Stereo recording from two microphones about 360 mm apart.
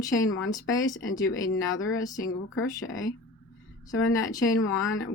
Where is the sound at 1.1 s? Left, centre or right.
Centre.